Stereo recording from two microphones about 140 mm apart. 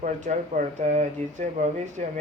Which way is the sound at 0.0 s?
65° right (ahead or behind).